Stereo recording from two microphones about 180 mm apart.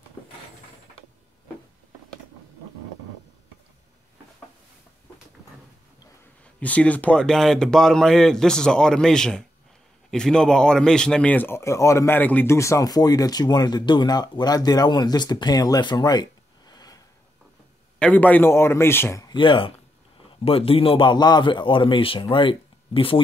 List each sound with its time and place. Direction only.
6.4 s speech: 5° left (ahead or behind)
17.9 s a man's voice: 10° left (ahead or behind); by 23.2 s 30° left (ahead or behind)